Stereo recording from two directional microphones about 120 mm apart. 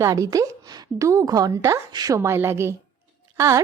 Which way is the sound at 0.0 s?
30° right (ahead or behind).